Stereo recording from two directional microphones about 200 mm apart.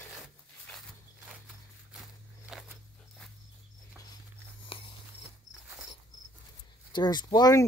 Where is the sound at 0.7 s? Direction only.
5° left (ahead or behind).